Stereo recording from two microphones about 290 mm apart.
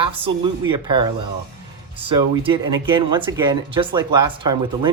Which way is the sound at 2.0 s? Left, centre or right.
Centre.